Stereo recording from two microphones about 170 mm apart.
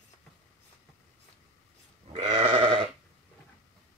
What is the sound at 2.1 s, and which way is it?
Sheep, 30° right (ahead or behind).